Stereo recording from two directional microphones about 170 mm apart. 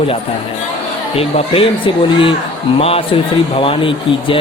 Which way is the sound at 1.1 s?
35° left (ahead or behind).